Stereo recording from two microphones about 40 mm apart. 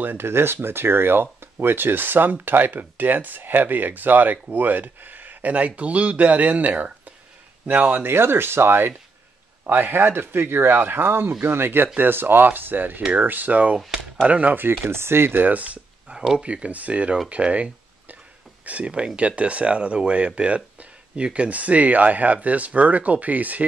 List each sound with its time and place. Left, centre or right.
0.0 s speech: right
8.0 s speech: right
9.7 s speech: right
14.5 s speech: right
14.9 s speech: right
15.4 s speech: right
21.5 s speech: right